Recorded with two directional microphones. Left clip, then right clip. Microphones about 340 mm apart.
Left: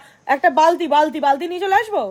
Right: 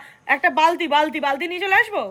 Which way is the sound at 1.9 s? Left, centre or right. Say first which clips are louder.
Left 4 dB; centre.